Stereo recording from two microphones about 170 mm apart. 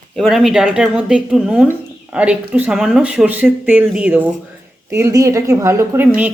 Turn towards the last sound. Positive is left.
turn(degrees=-10)  # may be behind; listen again after turning